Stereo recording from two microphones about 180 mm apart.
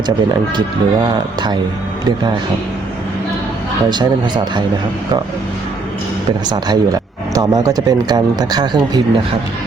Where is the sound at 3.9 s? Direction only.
25° right (ahead or behind).